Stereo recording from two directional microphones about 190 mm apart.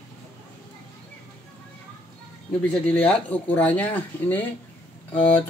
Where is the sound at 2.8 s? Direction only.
5° left (ahead or behind).